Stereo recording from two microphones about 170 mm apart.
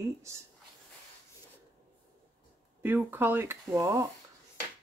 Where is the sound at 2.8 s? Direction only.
10° right (ahead or behind).